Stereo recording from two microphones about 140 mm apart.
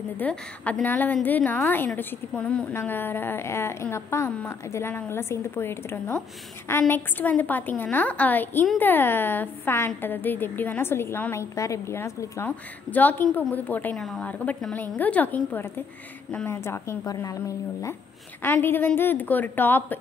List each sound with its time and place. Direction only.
0.2 s a woman's voice: 10° left (ahead or behind)